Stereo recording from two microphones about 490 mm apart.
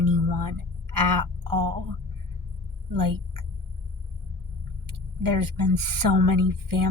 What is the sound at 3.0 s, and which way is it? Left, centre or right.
Speech, right.